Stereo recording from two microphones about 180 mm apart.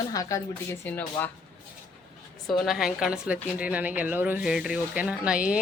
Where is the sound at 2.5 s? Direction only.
Centre (ahead or behind).